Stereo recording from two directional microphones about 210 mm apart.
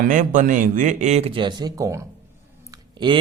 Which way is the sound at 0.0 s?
40° right (ahead or behind).